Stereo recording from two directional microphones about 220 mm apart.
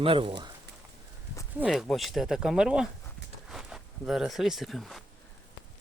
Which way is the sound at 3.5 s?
Centre (ahead or behind).